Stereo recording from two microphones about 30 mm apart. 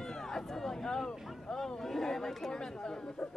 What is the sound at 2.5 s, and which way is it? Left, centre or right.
Speech, left.